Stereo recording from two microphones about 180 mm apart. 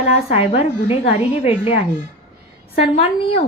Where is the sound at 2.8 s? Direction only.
35° left (ahead or behind).